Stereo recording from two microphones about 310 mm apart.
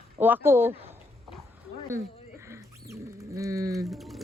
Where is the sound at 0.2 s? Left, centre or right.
Centre.